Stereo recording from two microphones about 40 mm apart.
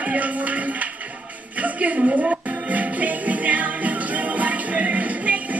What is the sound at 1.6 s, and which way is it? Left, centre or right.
Music, right.